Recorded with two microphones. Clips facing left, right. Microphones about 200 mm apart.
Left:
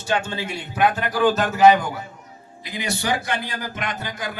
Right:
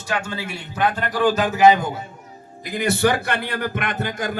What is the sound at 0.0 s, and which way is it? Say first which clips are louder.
Speech: left 2 dB; 25° left (ahead or behind).